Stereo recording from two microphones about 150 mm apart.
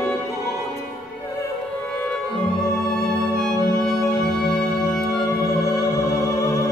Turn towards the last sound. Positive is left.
turn(degrees=20)  # may be behind; listen again after turning